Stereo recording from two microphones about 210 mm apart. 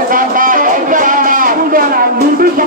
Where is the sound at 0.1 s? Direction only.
40° right (ahead or behind).